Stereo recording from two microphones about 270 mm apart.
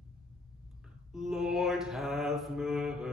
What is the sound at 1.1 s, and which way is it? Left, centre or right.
Mantra, centre.